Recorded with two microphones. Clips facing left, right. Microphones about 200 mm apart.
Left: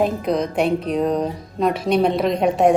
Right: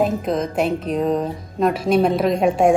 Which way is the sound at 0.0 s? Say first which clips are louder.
Even; centre (ahead or behind).